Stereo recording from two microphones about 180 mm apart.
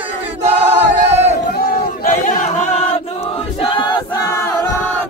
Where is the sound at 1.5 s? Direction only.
55° left (ahead or behind); by 4.0 s 25° left (ahead or behind).